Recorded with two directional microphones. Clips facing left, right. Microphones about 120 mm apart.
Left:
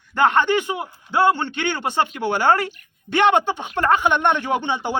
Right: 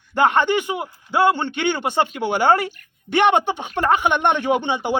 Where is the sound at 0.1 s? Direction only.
15° right (ahead or behind).